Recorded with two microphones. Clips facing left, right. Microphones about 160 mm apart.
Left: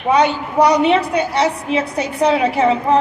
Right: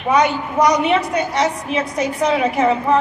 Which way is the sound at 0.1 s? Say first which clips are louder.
Left 1 dB; 30° left (ahead or behind).